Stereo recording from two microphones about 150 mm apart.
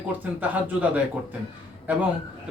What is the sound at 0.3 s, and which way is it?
A man's voice, 10° right (ahead or behind).